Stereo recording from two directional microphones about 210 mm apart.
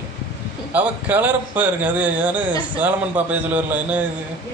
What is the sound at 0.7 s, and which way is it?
Speech, 10° right (ahead or behind).